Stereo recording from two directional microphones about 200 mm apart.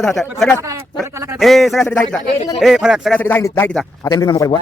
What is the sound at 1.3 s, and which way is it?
A man's voice, centre (ahead or behind).